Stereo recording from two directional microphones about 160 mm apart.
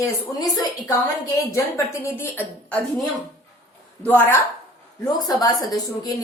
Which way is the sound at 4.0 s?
10° left (ahead or behind).